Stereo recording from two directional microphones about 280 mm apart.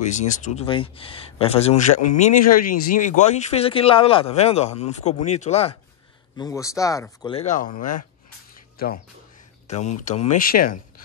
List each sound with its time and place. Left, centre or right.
0.1 s speech: left
8.7 s speech: left